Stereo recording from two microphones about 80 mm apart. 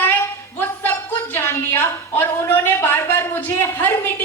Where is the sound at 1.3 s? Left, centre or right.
Left.